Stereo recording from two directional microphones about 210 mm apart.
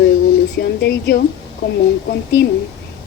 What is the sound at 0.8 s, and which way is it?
Speech, 50° left (ahead or behind).